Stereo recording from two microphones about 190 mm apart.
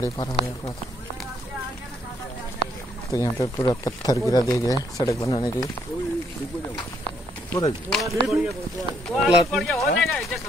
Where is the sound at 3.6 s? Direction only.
20° left (ahead or behind).